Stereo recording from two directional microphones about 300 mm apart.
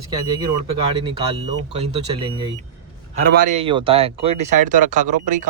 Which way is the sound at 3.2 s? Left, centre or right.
Right.